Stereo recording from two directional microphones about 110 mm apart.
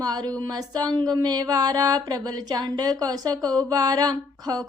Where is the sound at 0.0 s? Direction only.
35° right (ahead or behind).